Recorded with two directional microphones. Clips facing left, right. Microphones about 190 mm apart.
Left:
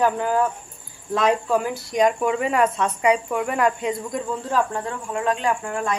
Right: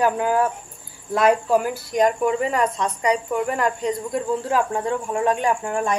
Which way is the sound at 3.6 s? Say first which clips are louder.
Left 1 dB; 5° left (ahead or behind).